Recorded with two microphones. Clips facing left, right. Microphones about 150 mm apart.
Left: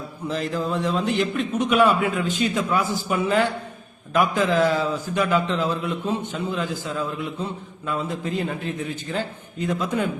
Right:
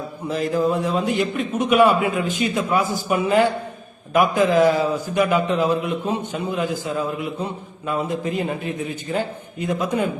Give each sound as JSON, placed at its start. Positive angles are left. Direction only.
{"t": 0.3, "sound": "a man's voice", "side_deg": -10}